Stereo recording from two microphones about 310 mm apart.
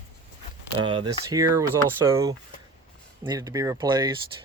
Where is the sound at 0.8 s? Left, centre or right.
Centre.